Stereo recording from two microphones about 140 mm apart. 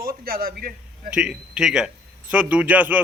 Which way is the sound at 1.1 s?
5° right (ahead or behind).